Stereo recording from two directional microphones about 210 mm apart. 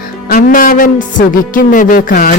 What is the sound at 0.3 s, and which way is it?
A man's voice, 40° left (ahead or behind).